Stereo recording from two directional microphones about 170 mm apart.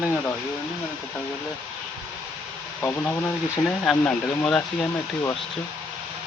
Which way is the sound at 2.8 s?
10° left (ahead or behind).